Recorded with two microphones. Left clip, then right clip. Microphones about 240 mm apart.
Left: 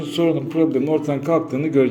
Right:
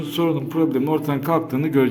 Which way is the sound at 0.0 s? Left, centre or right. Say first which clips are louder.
Left 2 dB; centre.